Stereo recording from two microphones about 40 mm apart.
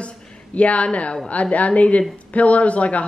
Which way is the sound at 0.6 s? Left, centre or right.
Left.